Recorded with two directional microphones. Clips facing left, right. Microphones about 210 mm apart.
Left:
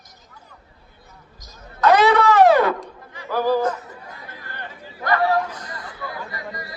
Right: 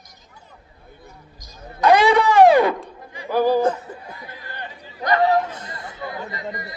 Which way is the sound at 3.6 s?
30° right (ahead or behind).